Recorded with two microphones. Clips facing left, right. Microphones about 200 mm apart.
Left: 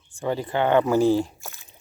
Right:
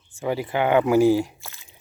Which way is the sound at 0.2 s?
10° right (ahead or behind).